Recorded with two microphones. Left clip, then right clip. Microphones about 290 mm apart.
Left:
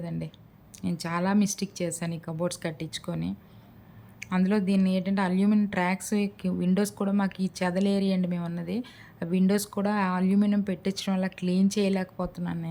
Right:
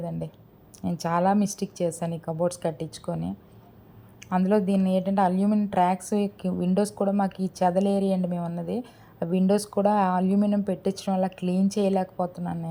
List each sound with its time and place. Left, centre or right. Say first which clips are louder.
0.8 s a woman's voice: right 6 dB; centre
2.2 s a woman's voice: right 5 dB; centre
2.5 s a woman's voice: right 4 dB; centre
12.1 s speech: right 5 dB; left